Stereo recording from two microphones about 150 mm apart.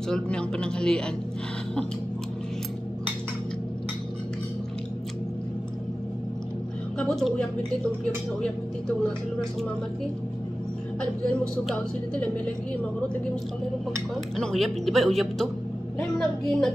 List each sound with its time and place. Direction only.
0.1 s a woman's voice: 5° left (ahead or behind)
7.0 s a woman's voice: 5° left (ahead or behind)
9.0 s a woman's voice: centre (ahead or behind)
14.3 s a woman's voice: centre (ahead or behind)